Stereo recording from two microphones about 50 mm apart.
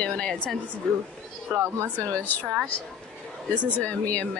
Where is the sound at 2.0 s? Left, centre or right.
Left.